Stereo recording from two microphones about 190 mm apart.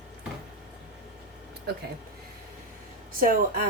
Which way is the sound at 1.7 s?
55° right (ahead or behind).